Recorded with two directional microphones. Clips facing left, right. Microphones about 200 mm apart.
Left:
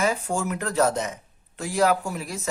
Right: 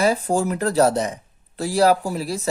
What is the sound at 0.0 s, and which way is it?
Speech, 35° right (ahead or behind).